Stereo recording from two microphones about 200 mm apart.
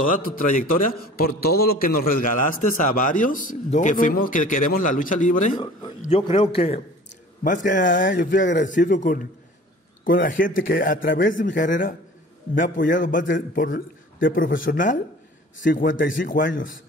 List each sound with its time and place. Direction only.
0.0 s a man's voice: 45° left (ahead or behind)
6.0 s a man's voice: 25° left (ahead or behind)
7.4 s a man's voice: 40° left (ahead or behind)